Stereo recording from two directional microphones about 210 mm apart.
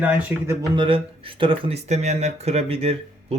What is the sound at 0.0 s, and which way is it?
Speech, 10° right (ahead or behind).